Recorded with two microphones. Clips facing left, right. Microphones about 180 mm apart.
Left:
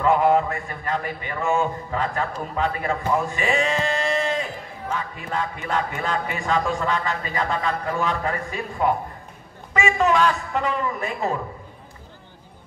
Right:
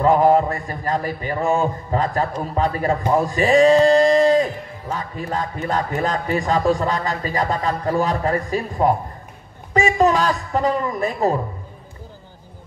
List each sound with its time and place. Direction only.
0.0 s speech: 35° right (ahead or behind)